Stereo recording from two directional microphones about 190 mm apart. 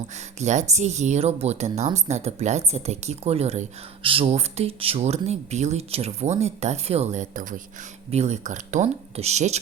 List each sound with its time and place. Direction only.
0.1 s speech: 35° right (ahead or behind)